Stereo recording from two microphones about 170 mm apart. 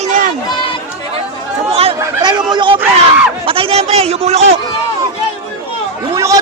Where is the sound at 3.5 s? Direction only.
30° right (ahead or behind).